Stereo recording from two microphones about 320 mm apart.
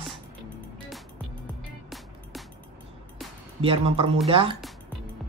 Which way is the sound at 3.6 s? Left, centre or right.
Centre.